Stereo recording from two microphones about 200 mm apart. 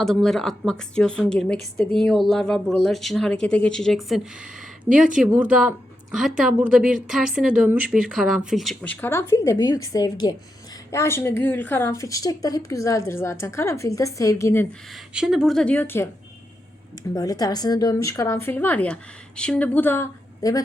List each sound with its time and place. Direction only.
0.0 s a woman's voice: centre (ahead or behind)
15.1 s a woman's voice: 5° right (ahead or behind)
17.2 s speech: 20° left (ahead or behind)